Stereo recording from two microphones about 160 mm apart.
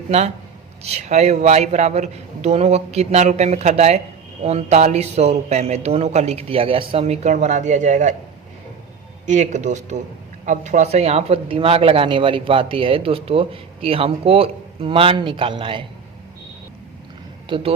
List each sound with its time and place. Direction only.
0.1 s a man's voice: 40° right (ahead or behind)
9.2 s a man's voice: 50° right (ahead or behind); by 15.9 s 30° right (ahead or behind)
17.5 s speech: 35° right (ahead or behind)